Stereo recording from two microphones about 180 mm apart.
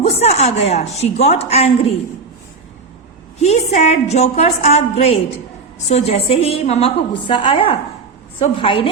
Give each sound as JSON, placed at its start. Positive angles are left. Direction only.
{"t": 0.0, "sound": "a woman's voice", "side_deg": 35}
{"t": 3.4, "sound": "a woman's voice", "side_deg": 35}